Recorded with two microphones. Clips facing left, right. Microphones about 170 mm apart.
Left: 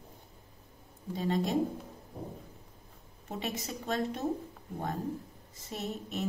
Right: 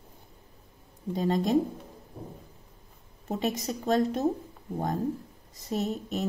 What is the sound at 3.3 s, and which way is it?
Speech, 40° right (ahead or behind).